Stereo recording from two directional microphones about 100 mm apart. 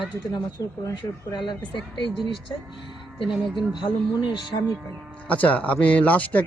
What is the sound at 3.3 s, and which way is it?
Speech, centre (ahead or behind).